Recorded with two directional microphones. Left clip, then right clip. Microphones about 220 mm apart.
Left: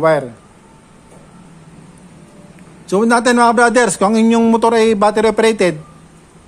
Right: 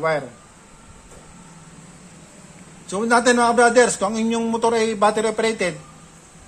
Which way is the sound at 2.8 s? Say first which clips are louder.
Left 4 dB; 45° left (ahead or behind).